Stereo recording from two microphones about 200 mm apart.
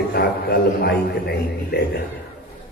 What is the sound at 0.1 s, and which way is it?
A man's voice, 50° left (ahead or behind).